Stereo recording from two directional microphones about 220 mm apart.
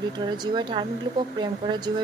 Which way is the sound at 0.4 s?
20° right (ahead or behind).